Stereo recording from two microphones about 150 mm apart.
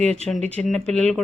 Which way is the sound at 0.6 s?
10° left (ahead or behind).